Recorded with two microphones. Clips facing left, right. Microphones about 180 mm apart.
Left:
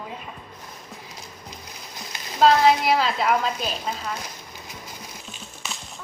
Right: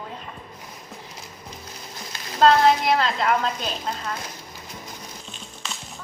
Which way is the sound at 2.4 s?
5° left (ahead or behind).